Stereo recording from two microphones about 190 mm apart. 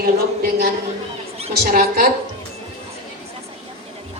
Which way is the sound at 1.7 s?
50° right (ahead or behind).